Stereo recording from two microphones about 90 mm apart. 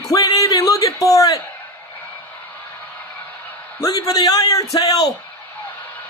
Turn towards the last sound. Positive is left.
turn(degrees=45)  # may be behind; listen again after turning